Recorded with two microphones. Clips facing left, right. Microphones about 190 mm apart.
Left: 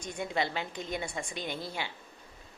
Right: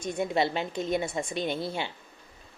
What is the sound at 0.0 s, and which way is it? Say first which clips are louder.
A woman's voice: right 6 dB; 25° right (ahead or behind).